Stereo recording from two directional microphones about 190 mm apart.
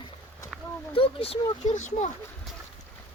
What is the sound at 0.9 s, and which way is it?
Speech, 30° left (ahead or behind).